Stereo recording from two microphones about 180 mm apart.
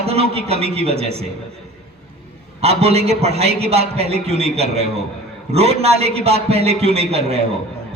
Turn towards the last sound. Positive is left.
turn(degrees=-35)  # may be behind; listen again after turning